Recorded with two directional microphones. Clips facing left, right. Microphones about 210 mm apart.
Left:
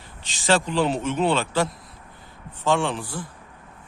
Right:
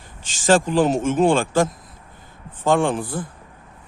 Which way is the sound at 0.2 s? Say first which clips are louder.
Right 5 dB; 45° right (ahead or behind).